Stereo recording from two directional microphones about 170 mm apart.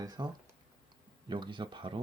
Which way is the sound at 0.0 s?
20° right (ahead or behind).